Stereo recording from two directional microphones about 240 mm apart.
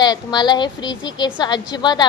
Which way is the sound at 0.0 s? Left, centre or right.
Centre.